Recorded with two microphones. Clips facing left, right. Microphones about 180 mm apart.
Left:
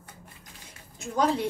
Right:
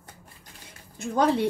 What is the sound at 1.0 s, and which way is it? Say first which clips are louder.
Speech: right 3 dB; 60° right (ahead or behind).